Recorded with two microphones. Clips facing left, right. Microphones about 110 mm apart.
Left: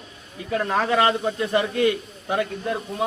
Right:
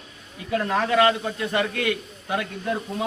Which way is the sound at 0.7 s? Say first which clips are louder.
Right 1 dB; 25° left (ahead or behind).